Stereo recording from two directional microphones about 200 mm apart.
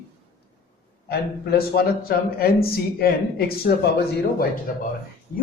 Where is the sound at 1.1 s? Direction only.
50° left (ahead or behind).